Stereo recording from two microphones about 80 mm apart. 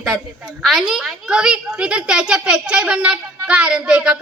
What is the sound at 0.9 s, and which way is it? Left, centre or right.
A child's voice, centre.